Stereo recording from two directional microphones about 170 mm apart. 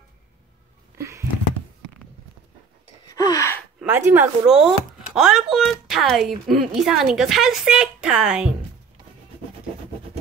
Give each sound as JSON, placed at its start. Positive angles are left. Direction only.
{"t": 0.9, "sound": "a sound", "side_deg": -15}
{"t": 3.1, "sound": "gasp", "side_deg": 20}
{"t": 3.8, "sound": "speech", "side_deg": -10}